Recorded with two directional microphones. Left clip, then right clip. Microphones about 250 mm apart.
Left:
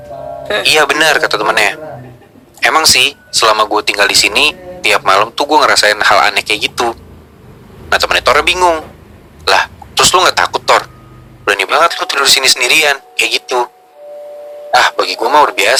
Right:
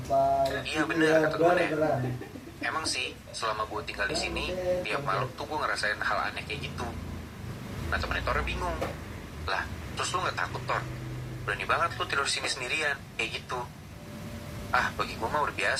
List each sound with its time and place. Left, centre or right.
0.6 s speech: left
14.7 s speech: left